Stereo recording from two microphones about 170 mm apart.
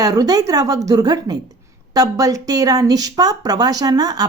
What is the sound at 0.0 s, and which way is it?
Speech, 20° right (ahead or behind).